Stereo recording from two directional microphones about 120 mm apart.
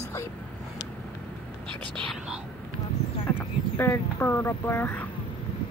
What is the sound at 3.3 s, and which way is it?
Speech, 20° left (ahead or behind).